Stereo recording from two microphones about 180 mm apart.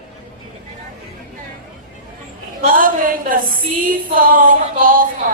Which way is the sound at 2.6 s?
50° right (ahead or behind).